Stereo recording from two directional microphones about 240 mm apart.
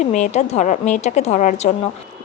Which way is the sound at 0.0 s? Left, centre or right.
Left.